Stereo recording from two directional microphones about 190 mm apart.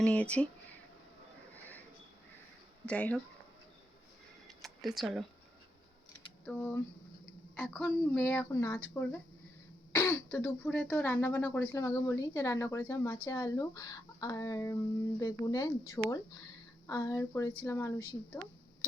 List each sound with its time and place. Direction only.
0.0 s speech: 5° left (ahead or behind)
2.8 s speech: 5° left (ahead or behind)
4.4 s camera: centre (ahead or behind)
6.4 s speech: 10° left (ahead or behind)